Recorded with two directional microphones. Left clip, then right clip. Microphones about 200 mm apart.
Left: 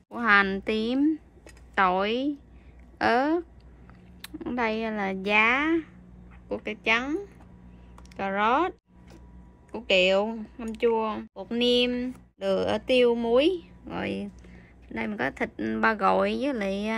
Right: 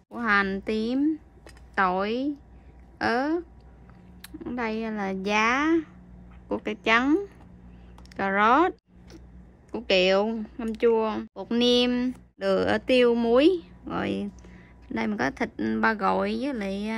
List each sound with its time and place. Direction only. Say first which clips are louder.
0.1 s a woman's voice: left 3 dB; centre (ahead or behind)
6.5 s speech: right 3 dB; 30° right (ahead or behind)
8.1 s a sound: right 3 dB; 30° right (ahead or behind)
9.7 s a woman's voice: even; 30° right (ahead or behind); by 16.9 s centre (ahead or behind)